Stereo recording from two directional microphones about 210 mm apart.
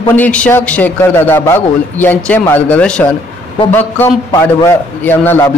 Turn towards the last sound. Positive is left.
turn(degrees=10)  # may be behind; listen again after turning